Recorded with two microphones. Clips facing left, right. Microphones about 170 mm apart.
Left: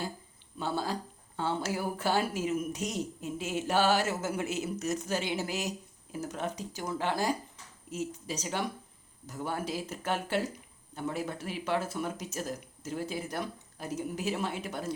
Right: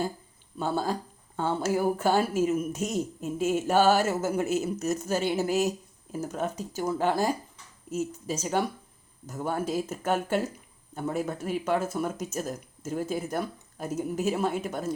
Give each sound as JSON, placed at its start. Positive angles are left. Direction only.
{"t": 0.6, "sound": "speech", "side_deg": -45}